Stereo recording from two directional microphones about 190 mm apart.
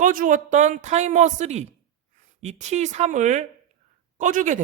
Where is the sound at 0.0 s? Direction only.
45° right (ahead or behind).